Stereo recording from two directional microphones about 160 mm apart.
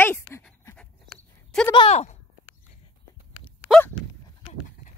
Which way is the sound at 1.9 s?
45° left (ahead or behind).